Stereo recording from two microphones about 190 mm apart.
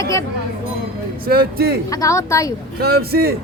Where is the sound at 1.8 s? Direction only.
15° left (ahead or behind).